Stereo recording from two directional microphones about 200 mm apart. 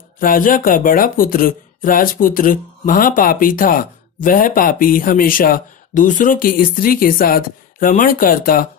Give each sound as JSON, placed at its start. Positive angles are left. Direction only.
{"t": 0.2, "sound": "speech", "side_deg": 45}